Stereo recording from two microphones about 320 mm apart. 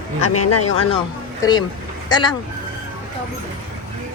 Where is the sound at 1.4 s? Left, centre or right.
Centre.